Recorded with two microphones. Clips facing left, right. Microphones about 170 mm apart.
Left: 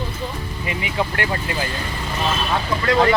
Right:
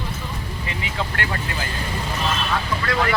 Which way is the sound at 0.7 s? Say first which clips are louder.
Left 5 dB; 15° left (ahead or behind).